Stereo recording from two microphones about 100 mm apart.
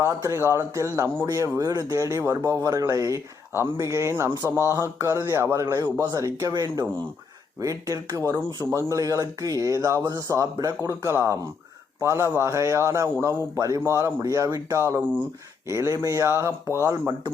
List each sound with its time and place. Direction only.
0.0 s speech: 30° right (ahead or behind)
6.5 s speech: 45° right (ahead or behind)
7.6 s speech: 35° right (ahead or behind)